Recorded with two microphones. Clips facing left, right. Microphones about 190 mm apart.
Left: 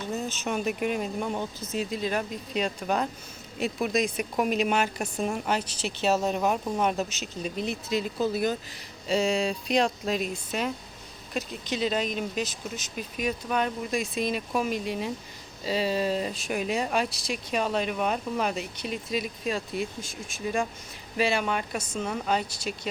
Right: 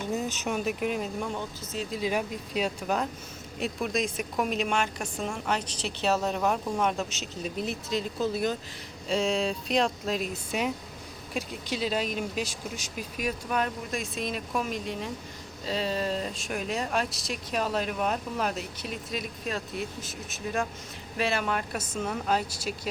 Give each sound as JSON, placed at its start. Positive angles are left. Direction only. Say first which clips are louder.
{"t": 0.3, "sound": "speech", "louder": "left 1 dB", "side_deg": -5}
{"t": 1.3, "sound": "speech", "louder": "left 3 dB", "side_deg": 15}
{"t": 1.9, "sound": "speech", "louder": "right 4 dB", "side_deg": -10}